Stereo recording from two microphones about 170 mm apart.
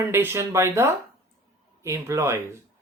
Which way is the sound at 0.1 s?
15° right (ahead or behind).